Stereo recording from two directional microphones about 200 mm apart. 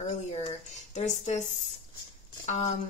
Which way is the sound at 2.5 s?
35° left (ahead or behind).